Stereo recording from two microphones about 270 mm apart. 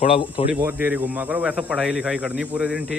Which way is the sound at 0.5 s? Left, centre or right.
Centre.